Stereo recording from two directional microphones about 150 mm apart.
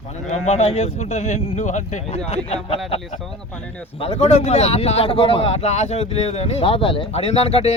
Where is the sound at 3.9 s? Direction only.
40° left (ahead or behind).